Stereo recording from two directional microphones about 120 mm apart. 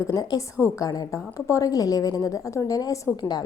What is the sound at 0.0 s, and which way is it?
A woman's voice, 30° left (ahead or behind).